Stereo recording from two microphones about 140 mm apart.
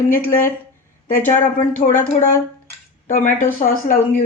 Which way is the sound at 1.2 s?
15° left (ahead or behind).